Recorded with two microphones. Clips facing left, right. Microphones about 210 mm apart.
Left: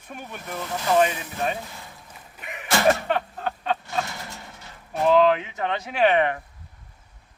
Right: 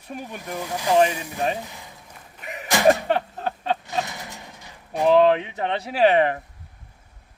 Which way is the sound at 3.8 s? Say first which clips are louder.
Right 1 dB; 15° right (ahead or behind).